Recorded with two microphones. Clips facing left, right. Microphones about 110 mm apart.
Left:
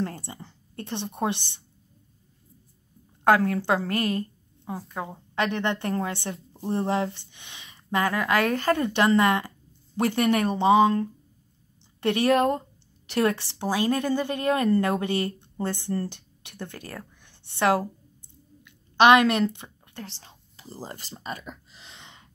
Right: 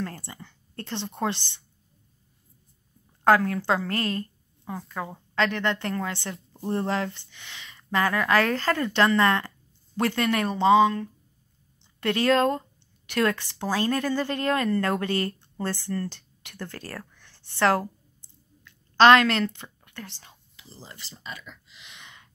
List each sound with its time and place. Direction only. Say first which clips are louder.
0.0 s speech: left 3 dB; 20° left (ahead or behind)
3.3 s a woman's voice: even; 25° left (ahead or behind)
6.3 s a sound: even; centre (ahead or behind)
6.7 s speech: left 1 dB; 20° left (ahead or behind)
12.0 s a woman's voice: left 1 dB; 20° left (ahead or behind)
20.5 s speech: left 8 dB; 45° left (ahead or behind); by 22.3 s 25° left (ahead or behind)